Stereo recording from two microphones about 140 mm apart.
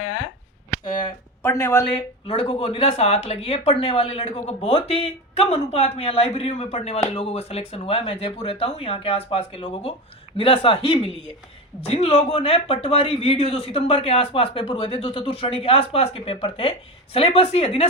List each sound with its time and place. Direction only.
1.4 s speech: 20° left (ahead or behind)
2.2 s speech: 40° left (ahead or behind)